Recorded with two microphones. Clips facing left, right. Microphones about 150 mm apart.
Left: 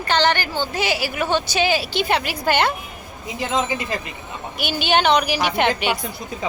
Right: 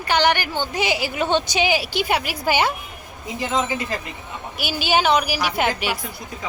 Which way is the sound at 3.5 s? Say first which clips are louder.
Left 1 dB; 20° left (ahead or behind).